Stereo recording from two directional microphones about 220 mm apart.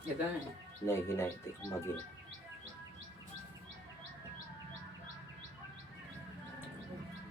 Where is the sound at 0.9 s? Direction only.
10° left (ahead or behind).